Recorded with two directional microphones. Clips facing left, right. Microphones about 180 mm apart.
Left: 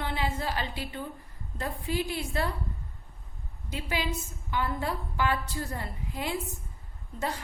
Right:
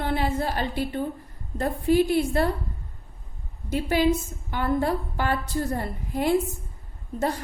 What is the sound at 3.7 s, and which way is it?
A woman's voice, 50° right (ahead or behind).